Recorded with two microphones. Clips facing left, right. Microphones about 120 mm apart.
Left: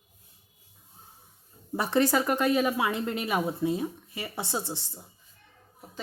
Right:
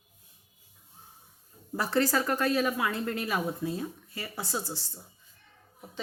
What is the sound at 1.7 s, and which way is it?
Speech, 20° left (ahead or behind).